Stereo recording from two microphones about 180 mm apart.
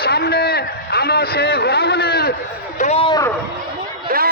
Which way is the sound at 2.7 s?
35° left (ahead or behind).